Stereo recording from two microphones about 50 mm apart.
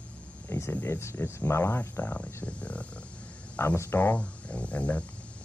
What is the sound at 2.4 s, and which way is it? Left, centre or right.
Speech, left.